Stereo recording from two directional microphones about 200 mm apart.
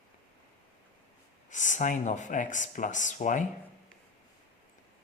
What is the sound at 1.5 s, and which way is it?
Speech, 40° left (ahead or behind).